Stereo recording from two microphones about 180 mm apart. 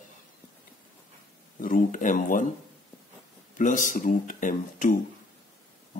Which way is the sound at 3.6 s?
45° left (ahead or behind).